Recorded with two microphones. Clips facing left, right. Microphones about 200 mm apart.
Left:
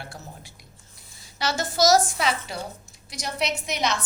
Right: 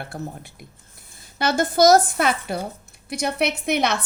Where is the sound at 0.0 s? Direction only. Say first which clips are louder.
Right 8 dB; 55° right (ahead or behind).